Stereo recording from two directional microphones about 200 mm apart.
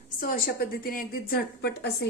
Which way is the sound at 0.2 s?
45° left (ahead or behind).